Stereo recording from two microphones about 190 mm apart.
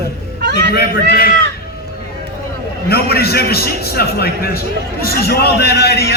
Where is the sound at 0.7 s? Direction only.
55° left (ahead or behind).